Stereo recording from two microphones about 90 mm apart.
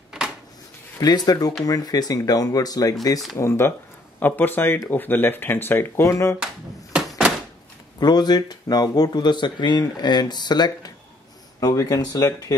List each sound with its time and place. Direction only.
0.9 s speech: 45° left (ahead or behind)
3.3 s speech: 30° left (ahead or behind)
7.1 s door: 10° right (ahead or behind)
8.0 s speech: 50° left (ahead or behind)